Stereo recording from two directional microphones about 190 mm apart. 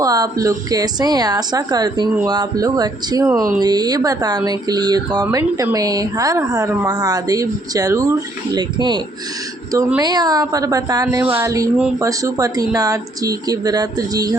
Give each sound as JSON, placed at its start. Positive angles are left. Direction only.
{"t": 0.0, "sound": "speech", "side_deg": -20}
{"t": 10.0, "sound": "speech", "side_deg": -20}